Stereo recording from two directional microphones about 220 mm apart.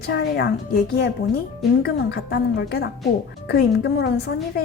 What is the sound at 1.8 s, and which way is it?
A woman's voice, 50° left (ahead or behind).